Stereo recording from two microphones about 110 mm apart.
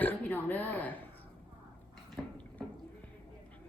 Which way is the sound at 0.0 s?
15° left (ahead or behind).